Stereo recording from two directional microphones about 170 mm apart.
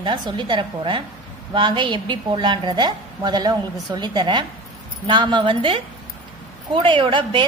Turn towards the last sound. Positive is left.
turn(degrees=-30)  # may be behind; listen again after turning